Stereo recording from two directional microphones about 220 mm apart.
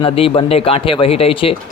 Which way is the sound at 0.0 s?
25° left (ahead or behind).